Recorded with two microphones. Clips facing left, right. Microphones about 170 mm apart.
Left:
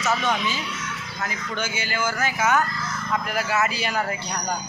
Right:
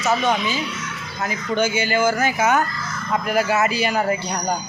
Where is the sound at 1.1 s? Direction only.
15° right (ahead or behind).